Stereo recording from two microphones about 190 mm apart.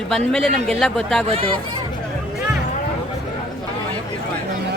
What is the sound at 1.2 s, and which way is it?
Speech, 30° right (ahead or behind).